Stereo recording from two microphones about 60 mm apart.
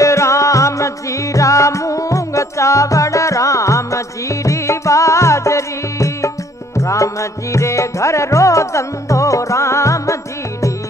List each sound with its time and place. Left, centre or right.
0.0 s music: left